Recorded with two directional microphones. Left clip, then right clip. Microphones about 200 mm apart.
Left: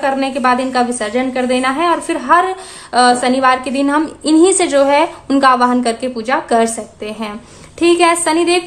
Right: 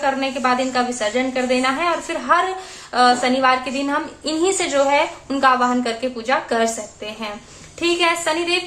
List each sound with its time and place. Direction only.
0.0 s a woman's voice: 40° left (ahead or behind)